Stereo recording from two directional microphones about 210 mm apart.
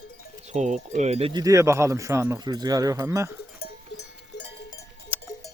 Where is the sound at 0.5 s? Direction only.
35° right (ahead or behind); by 3.3 s 15° right (ahead or behind).